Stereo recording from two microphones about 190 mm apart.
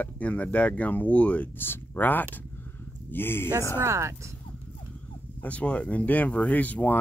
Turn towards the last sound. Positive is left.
turn(degrees=10)  # may be behind; listen again after turning